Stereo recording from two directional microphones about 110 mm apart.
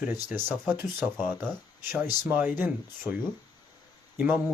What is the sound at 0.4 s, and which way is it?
Speech, 5° left (ahead or behind).